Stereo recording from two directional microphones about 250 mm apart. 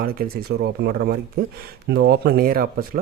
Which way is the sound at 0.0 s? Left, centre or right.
Right.